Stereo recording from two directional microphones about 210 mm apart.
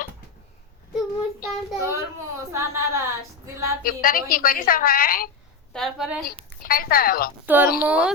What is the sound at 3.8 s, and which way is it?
A woman's voice, 40° left (ahead or behind).